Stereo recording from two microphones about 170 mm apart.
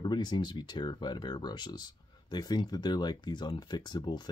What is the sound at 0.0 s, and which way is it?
Speech, 25° left (ahead or behind).